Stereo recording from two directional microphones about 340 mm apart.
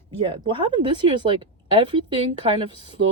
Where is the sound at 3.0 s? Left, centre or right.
Right.